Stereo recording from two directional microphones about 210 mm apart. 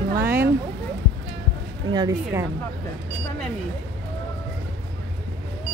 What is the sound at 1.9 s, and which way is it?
Speech, 15° right (ahead or behind).